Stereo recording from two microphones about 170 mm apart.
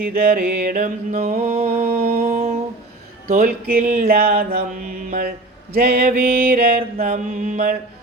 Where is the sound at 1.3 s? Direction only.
35° right (ahead or behind).